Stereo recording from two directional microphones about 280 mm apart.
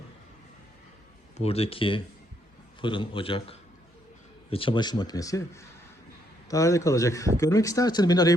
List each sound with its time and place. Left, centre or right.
1.4 s speech: left